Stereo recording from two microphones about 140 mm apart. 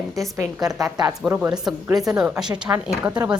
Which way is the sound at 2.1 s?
5° right (ahead or behind).